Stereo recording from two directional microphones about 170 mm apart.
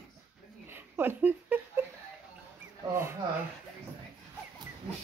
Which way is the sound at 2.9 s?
15° right (ahead or behind).